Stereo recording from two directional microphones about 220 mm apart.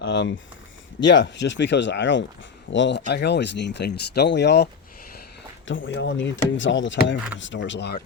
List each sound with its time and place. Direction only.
0.0 s speech: 50° left (ahead or behind)